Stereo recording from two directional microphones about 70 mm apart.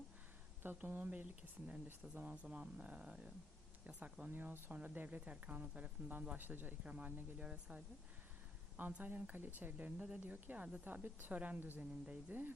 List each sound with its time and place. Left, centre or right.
0.6 s speech: right
8.9 s speech: right